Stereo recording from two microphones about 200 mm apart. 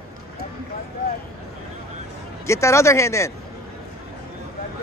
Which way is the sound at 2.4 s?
15° left (ahead or behind).